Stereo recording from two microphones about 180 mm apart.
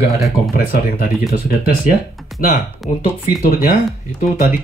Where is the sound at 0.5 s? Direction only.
55° left (ahead or behind).